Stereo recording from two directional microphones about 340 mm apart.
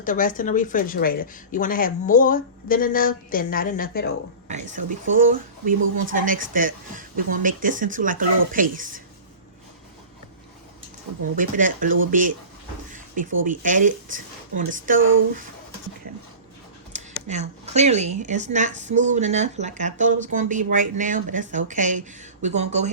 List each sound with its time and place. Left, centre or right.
0.0 s speech: left
4.4 s speech: right
11.3 s speech: right
12.9 s a sound: right
13.3 s speech: right
14.9 s speech: right
16.9 s speech: right